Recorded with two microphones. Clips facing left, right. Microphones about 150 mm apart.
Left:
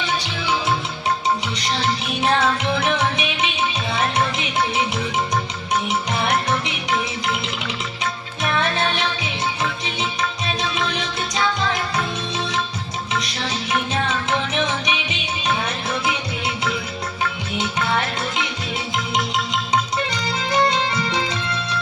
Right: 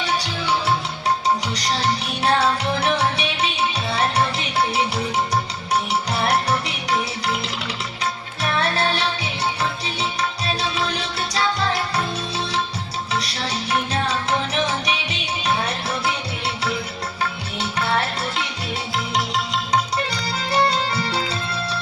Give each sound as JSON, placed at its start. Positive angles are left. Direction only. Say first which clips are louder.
{"t": 1.5, "sound": "music", "louder": "even", "side_deg": -35}
{"t": 8.6, "sound": "music", "louder": "even", "side_deg": -35}
{"t": 13.7, "sound": "music", "louder": "even", "side_deg": -35}
{"t": 20.1, "sound": "music", "louder": "left 1 dB", "side_deg": -35}